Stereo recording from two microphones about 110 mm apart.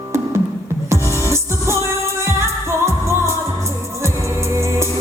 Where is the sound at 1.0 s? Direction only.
25° right (ahead or behind).